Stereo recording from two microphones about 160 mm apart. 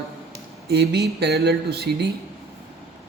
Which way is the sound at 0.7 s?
90° right.